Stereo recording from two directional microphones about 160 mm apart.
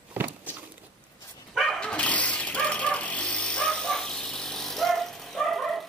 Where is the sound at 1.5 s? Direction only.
Centre (ahead or behind).